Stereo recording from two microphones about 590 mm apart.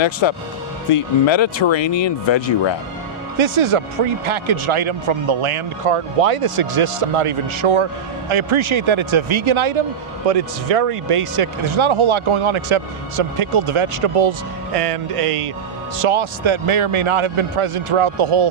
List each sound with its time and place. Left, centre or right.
0.0 s speech: left
3.3 s a man's voice: right
10.2 s speech: right